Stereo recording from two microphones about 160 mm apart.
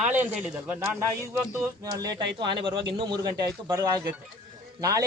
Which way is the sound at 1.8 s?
25° right (ahead or behind).